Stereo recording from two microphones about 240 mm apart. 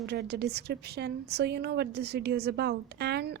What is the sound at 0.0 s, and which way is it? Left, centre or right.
A woman's voice, right.